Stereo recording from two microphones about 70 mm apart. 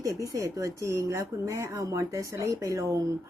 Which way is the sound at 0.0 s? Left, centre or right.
Right.